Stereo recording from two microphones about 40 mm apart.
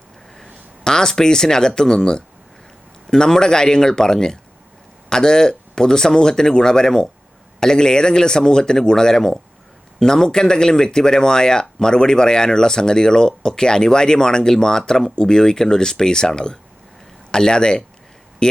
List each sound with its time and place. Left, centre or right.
0.9 s speech: centre